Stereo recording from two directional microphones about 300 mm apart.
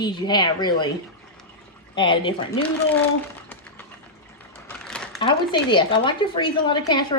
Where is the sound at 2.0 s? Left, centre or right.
Centre.